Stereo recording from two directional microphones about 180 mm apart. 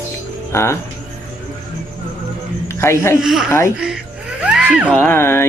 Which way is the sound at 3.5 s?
15° left (ahead or behind).